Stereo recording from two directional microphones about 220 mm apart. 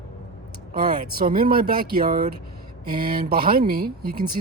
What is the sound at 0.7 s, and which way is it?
Speech, 40° right (ahead or behind).